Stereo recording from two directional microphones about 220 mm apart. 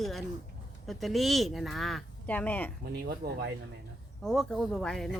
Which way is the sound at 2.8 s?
45° right (ahead or behind).